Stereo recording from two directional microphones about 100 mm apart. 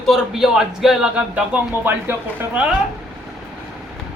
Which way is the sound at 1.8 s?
20° right (ahead or behind).